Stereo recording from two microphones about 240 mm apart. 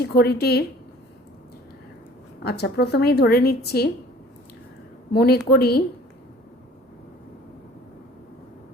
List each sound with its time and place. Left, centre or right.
0.0 s a woman's voice: left
2.4 s a woman's voice: left
5.1 s a woman's voice: left